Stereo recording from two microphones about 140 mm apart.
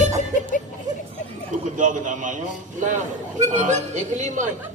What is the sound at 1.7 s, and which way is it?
Speech, 65° right (ahead or behind).